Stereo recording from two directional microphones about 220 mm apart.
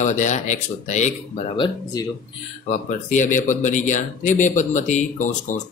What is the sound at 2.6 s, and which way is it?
Speech, 35° left (ahead or behind).